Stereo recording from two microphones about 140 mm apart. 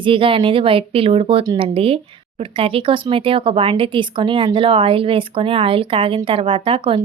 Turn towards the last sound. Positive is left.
turn(degrees=-40)  # may be behind; listen again after turning